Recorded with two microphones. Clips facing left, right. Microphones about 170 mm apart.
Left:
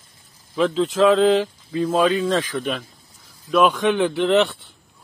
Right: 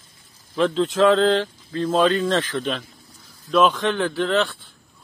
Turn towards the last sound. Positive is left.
turn(degrees=15)  # may be behind; listen again after turning